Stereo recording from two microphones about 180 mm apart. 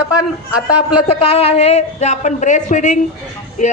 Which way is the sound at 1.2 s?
35° left (ahead or behind).